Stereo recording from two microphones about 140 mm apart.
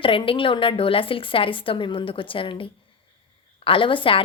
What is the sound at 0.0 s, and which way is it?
A woman's voice, 40° left (ahead or behind).